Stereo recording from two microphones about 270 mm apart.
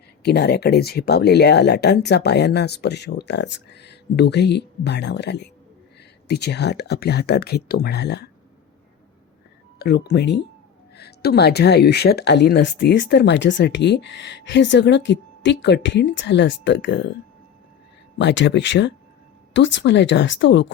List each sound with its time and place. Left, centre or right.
0.2 s speech: left
9.7 s speech: left
18.2 s speech: left